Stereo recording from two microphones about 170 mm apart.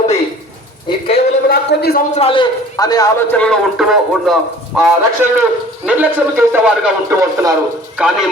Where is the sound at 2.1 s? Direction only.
35° left (ahead or behind).